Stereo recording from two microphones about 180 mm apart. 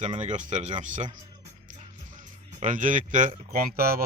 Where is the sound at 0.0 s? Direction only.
40° right (ahead or behind).